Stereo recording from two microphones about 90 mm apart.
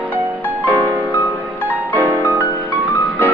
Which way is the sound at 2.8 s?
20° left (ahead or behind).